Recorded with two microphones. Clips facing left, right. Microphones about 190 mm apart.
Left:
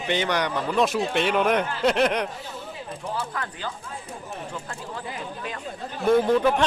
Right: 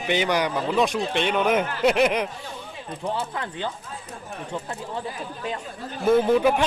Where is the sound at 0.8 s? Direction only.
Centre (ahead or behind).